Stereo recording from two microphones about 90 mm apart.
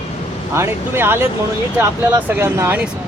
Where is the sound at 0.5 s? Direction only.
30° right (ahead or behind).